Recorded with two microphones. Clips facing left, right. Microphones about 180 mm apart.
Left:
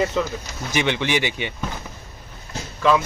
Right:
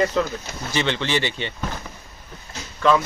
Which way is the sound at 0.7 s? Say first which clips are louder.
Left 1 dB; 15° left (ahead or behind).